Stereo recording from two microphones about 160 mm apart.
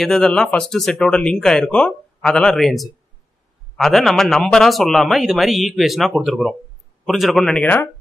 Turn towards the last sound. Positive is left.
turn(degrees=0)  # may be behind; listen again after turning